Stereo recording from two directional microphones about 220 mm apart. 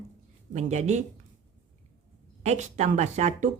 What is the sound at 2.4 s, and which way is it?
A woman's voice, 30° right (ahead or behind).